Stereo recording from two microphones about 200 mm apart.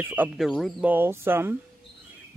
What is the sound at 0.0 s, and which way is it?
Speech, 10° right (ahead or behind).